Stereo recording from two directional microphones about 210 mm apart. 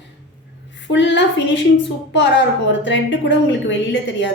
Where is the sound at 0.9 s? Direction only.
60° left (ahead or behind).